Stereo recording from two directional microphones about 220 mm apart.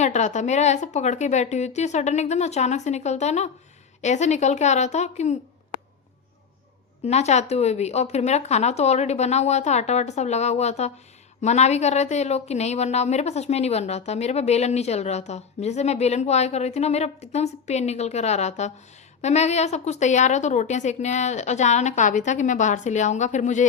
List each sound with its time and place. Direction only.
0.0 s a woman's voice: 30° left (ahead or behind)
7.0 s a woman's voice: 30° left (ahead or behind)